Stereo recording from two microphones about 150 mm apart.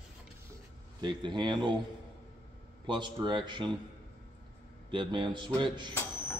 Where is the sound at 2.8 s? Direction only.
30° right (ahead or behind).